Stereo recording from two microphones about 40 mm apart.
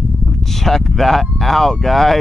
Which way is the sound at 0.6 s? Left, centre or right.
Centre.